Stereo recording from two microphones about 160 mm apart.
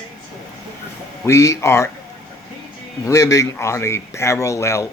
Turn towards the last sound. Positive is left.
turn(degrees=20)  # may be behind; listen again after turning